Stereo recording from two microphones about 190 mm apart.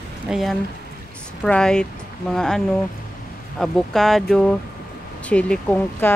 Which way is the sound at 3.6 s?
Centre (ahead or behind).